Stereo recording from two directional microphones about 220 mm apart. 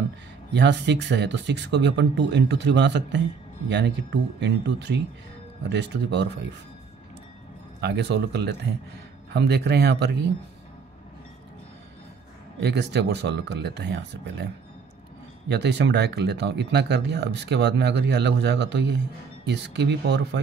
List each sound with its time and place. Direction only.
0.5 s speech: 50° right (ahead or behind)
7.8 s speech: 50° right (ahead or behind)
12.6 s speech: 50° right (ahead or behind)